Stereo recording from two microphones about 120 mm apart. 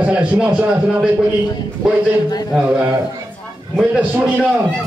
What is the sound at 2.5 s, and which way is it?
Speech, 10° right (ahead or behind).